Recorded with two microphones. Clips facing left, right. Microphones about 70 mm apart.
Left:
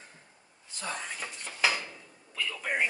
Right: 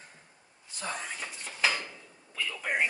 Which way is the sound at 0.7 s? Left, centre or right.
Centre.